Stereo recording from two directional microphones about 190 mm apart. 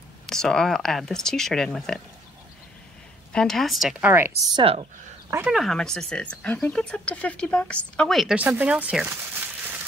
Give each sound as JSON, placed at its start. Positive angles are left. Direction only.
{"t": 0.3, "sound": "speech", "side_deg": 5}
{"t": 3.3, "sound": "speech", "side_deg": 0}
{"t": 4.6, "sound": "speech", "side_deg": -30}
{"t": 5.3, "sound": "speech", "side_deg": -10}
{"t": 5.6, "sound": "speech", "side_deg": 0}